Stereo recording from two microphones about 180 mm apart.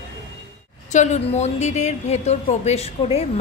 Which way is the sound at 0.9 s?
40° left (ahead or behind).